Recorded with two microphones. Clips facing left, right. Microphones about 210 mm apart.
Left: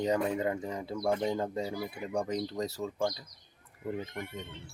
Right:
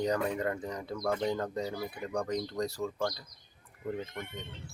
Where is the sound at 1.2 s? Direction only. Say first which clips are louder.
Left 1 dB; 10° left (ahead or behind).